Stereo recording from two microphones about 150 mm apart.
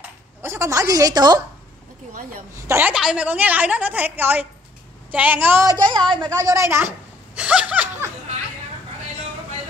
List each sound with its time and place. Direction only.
0.4 s a woman's voice: 20° right (ahead or behind)
2.6 s a woman's voice: 15° right (ahead or behind)
2.9 s a woman's voice: 5° right (ahead or behind)
5.9 s a woman's voice: 30° right (ahead or behind)
7.3 s a sound: 5° right (ahead or behind)